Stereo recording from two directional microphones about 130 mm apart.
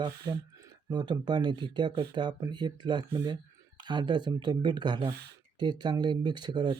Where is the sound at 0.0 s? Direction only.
25° right (ahead or behind).